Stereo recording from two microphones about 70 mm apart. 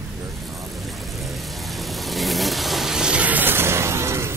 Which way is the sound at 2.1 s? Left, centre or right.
Centre.